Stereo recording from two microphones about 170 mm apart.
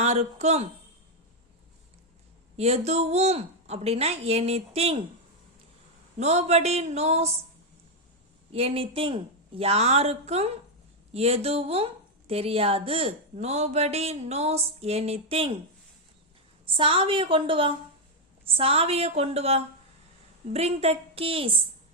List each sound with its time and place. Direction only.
0.0 s speech: 40° right (ahead or behind)
2.6 s speech: 40° right (ahead or behind)
6.1 s speech: 40° right (ahead or behind)
8.5 s speech: 35° right (ahead or behind)
16.6 s speech: 30° right (ahead or behind)